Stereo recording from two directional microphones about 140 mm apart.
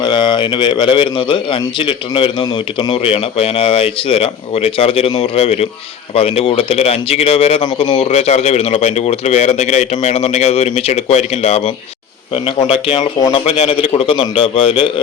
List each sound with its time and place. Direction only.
0.0 s a man's voice: 35° left (ahead or behind)
13.1 s speech: 25° left (ahead or behind)
13.4 s a man's voice: 40° left (ahead or behind)